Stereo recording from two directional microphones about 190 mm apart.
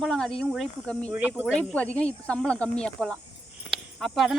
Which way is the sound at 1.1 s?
10° right (ahead or behind).